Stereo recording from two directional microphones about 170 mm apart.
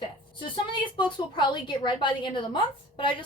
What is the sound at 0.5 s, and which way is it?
A woman's voice, 30° left (ahead or behind).